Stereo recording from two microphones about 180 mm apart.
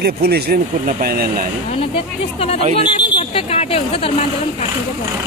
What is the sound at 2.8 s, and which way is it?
Speech, 30° left (ahead or behind).